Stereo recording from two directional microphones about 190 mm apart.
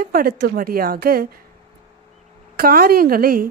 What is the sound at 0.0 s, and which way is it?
A woman's voice, 50° right (ahead or behind).